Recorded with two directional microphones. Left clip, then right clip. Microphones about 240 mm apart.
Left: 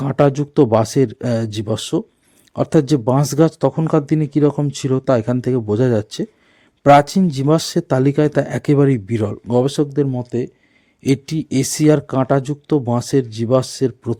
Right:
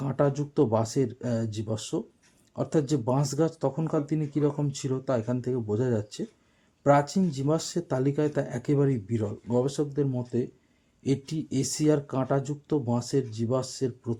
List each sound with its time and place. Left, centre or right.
0.0 s speech: left